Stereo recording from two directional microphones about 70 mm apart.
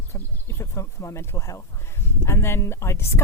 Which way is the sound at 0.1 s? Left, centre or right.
Left.